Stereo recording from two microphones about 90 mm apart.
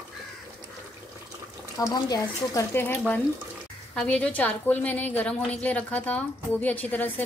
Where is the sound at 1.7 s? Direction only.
45° left (ahead or behind).